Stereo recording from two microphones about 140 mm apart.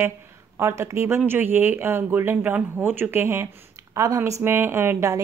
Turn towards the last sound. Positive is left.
turn(degrees=-20)  # may be behind; listen again after turning